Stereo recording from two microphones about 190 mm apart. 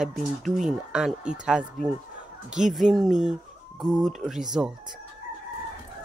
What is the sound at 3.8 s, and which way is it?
Speech, 20° right (ahead or behind).